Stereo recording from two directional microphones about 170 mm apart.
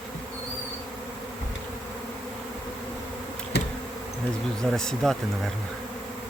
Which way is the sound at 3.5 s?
80° left.